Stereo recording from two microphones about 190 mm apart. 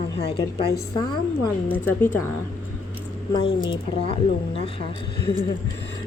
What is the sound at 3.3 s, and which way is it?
Speech, 25° left (ahead or behind).